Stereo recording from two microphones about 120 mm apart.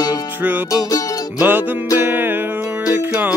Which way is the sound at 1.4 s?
15° right (ahead or behind).